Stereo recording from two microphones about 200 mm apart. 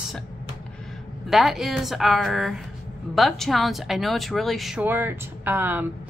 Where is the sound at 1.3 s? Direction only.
Centre (ahead or behind).